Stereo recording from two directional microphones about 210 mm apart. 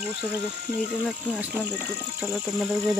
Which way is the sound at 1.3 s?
5° right (ahead or behind).